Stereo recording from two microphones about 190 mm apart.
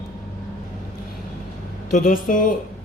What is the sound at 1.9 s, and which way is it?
Speech, 45° left (ahead or behind).